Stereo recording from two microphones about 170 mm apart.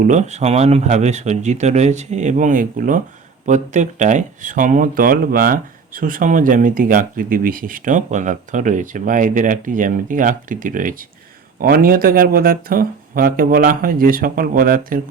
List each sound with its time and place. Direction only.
0.0 s speech: 45° right (ahead or behind)